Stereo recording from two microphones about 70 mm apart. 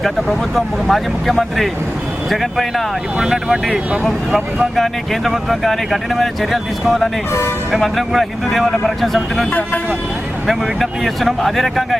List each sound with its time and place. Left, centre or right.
0.0 s speech: centre
9.5 s speech: left
10.4 s speech: centre